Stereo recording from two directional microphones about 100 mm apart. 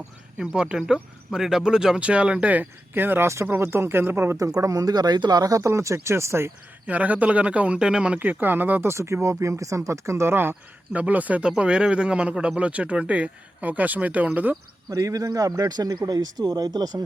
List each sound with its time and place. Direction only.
0.3 s speech: 10° right (ahead or behind); by 6.5 s 25° right (ahead or behind)
6.8 s speech: 15° right (ahead or behind)
14.8 s speech: 35° right (ahead or behind)